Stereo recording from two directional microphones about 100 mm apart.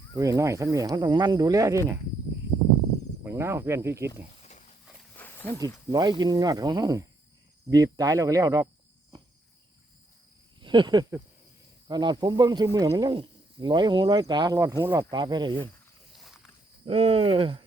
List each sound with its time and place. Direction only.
0.2 s speech: 35° right (ahead or behind)
3.2 s speech: 25° right (ahead or behind)
5.1 s a sound: 20° left (ahead or behind)
5.5 s speech: 40° right (ahead or behind)
10.6 s speech: 50° right (ahead or behind)
14.9 s speech: 45° right (ahead or behind)
16.1 s walk: centre (ahead or behind)
16.8 s speech: 80° right; by 17.6 s 65° right (ahead or behind)